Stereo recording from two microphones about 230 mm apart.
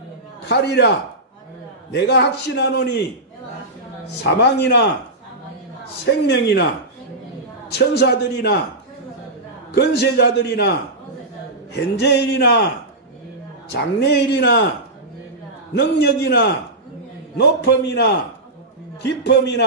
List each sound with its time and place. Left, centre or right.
0.5 s a man's voice: left
4.2 s a man's voice: left
6.0 s a man's voice: left
7.7 s a man's voice: left
9.7 s a man's voice: left
11.7 s a man's voice: left
13.7 s a man's voice: left
15.7 s a man's voice: left